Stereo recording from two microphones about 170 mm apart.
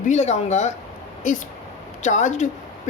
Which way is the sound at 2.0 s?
45° left (ahead or behind).